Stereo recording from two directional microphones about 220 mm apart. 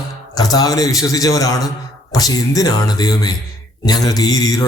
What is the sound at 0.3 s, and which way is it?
A man's voice, 15° left (ahead or behind).